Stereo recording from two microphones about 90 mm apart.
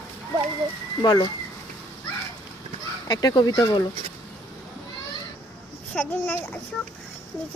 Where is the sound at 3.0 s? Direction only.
45° left (ahead or behind).